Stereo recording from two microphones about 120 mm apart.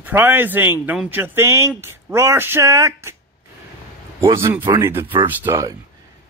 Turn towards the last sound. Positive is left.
turn(degrees=-15)  # may be behind; listen again after turning